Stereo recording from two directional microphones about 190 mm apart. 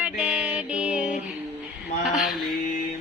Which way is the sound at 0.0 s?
5° right (ahead or behind).